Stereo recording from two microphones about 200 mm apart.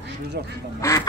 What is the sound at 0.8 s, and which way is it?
Speech, 15° left (ahead or behind).